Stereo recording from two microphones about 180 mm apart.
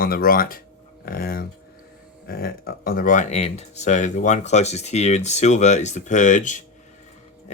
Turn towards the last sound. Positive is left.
turn(degrees=45)  # may be behind; listen again after turning